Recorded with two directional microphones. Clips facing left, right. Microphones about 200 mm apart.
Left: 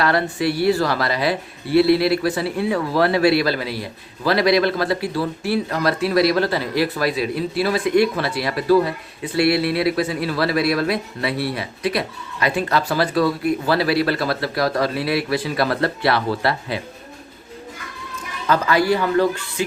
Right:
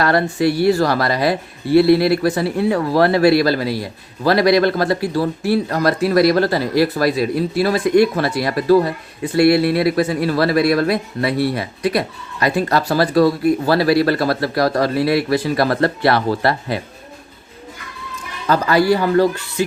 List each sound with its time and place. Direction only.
0.0 s speech: 45° right (ahead or behind)
18.4 s a man's voice: 35° right (ahead or behind)